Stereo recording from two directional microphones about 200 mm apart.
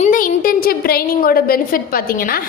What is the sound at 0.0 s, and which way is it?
A woman's voice, 40° left (ahead or behind).